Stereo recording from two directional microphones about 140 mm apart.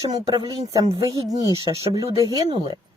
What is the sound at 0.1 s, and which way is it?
Speech, 25° right (ahead or behind).